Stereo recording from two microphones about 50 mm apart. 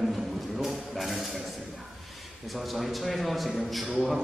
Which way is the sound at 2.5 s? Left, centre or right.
Centre.